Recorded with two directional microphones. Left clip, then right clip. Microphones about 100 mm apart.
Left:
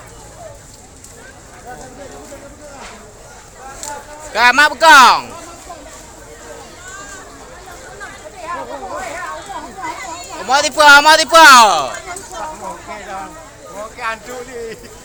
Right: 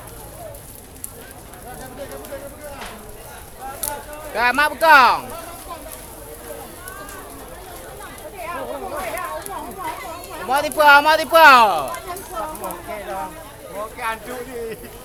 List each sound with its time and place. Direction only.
4.4 s speech: 70° left (ahead or behind)
10.4 s speech: 90° left
12.9 s a sound: 15° left (ahead or behind)